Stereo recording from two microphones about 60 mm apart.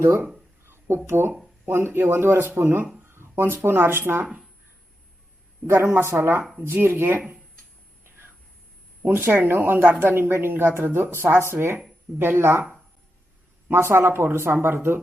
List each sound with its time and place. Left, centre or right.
0.0 s speech: right
0.6 s a sound: right
1.0 s speech: right
5.6 s speech: right
9.0 s speech: right
13.7 s speech: right